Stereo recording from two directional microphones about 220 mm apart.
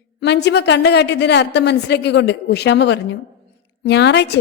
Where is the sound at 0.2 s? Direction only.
50° left (ahead or behind).